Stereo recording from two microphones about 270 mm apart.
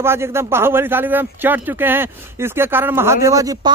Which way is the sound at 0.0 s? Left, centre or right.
Centre.